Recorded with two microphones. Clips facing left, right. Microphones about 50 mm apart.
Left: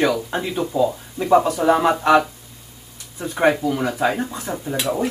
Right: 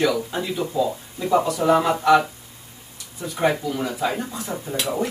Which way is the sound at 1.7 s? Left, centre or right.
Left.